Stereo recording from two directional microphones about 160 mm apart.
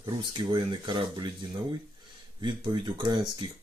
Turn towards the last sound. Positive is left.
turn(degrees=-30)  # may be behind; listen again after turning